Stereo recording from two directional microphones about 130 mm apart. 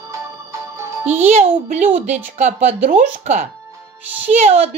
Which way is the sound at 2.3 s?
60° right (ahead or behind).